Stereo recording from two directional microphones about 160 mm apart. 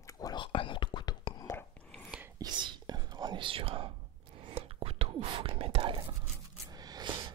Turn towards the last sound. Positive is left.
turn(degrees=-25)  # may be behind; listen again after turning